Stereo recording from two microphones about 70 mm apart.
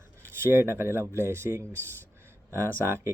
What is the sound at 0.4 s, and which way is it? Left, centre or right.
Speech, right.